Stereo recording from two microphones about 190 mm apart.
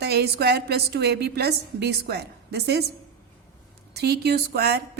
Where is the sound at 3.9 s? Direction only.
60° right (ahead or behind).